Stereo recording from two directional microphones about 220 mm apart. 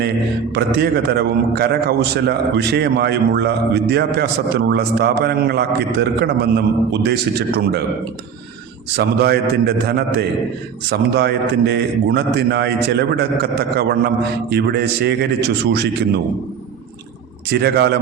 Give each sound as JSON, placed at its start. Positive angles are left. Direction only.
{"t": 0.5, "sound": "a man's voice", "side_deg": -45}
{"t": 9.0, "sound": "a man's voice", "side_deg": -45}
{"t": 17.5, "sound": "a man's voice", "side_deg": -45}